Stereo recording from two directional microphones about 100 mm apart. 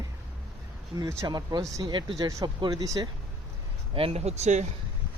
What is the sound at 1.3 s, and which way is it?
Speech, 45° right (ahead or behind).